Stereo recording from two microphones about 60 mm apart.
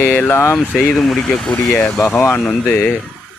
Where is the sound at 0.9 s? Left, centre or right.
Centre.